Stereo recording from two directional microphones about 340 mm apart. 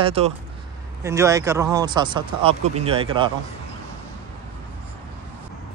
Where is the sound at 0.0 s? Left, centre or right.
Centre.